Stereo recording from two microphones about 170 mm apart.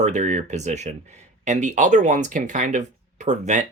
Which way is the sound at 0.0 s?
45° right (ahead or behind).